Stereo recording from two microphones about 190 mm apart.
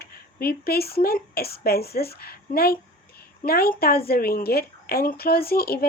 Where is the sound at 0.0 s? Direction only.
55° left (ahead or behind).